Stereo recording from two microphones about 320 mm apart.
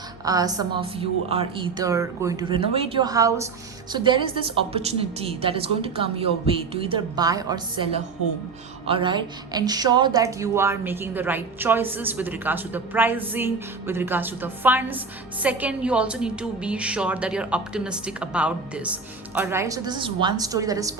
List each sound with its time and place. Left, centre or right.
0.3 s a woman's voice: centre